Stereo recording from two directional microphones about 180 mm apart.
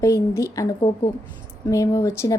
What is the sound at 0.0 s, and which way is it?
A woman's voice, 15° left (ahead or behind).